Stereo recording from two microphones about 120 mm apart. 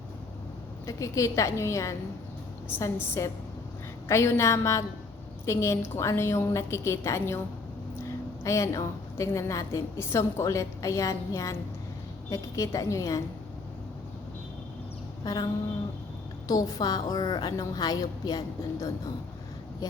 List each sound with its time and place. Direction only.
0.9 s a woman's voice: 25° left (ahead or behind)
8.4 s a woman's voice: 25° left (ahead or behind)
15.2 s a sound: 35° left (ahead or behind)
16.5 s a woman's voice: 30° left (ahead or behind)